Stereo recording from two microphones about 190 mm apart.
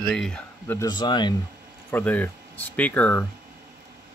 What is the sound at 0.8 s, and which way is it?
Speech, 20° left (ahead or behind).